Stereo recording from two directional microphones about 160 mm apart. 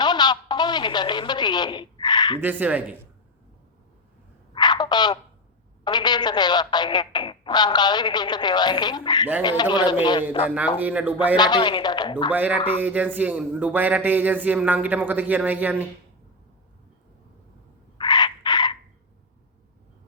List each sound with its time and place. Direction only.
0.0 s telephone: 25° left (ahead or behind)
2.4 s a man's voice: 10° right (ahead or behind)
4.5 s a sound: 25° left (ahead or behind)
5.8 s speech: 25° left (ahead or behind)
10.8 s a man's voice: 10° right (ahead or behind)
11.3 s speech: 25° left (ahead or behind)
12.3 s a man's voice: 10° right (ahead or behind)
17.9 s chicken: 25° left (ahead or behind)